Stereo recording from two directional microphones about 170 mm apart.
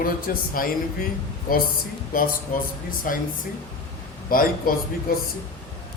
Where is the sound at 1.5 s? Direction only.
60° left (ahead or behind).